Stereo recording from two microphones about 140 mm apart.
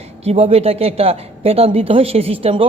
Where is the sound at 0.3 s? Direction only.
45° right (ahead or behind).